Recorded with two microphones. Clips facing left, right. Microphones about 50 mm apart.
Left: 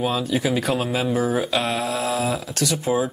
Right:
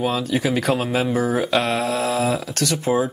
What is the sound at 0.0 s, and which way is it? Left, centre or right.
Speech, right.